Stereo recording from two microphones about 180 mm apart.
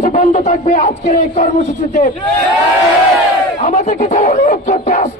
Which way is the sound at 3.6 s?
40° left (ahead or behind).